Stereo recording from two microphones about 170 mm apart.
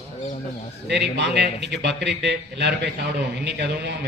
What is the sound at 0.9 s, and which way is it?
A man's voice, 85° right.